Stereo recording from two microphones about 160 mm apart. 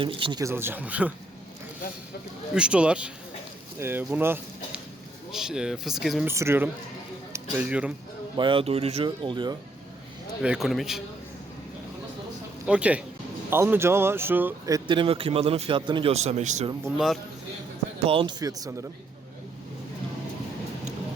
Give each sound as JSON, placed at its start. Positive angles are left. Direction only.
{"t": 0.0, "sound": "a man's voice", "side_deg": -30}
{"t": 0.4, "sound": "speech", "side_deg": -15}
{"t": 2.6, "sound": "speech", "side_deg": -5}
{"t": 6.2, "sound": "speech", "side_deg": -15}
{"t": 8.4, "sound": "a man's voice", "side_deg": -35}
{"t": 9.0, "sound": "speech", "side_deg": -30}
{"t": 10.4, "sound": "speech", "side_deg": -5}
{"t": 12.6, "sound": "speech", "side_deg": -10}
{"t": 14.8, "sound": "a man's voice", "side_deg": -30}
{"t": 16.1, "sound": "speech", "side_deg": -45}
{"t": 18.0, "sound": "speech", "side_deg": -35}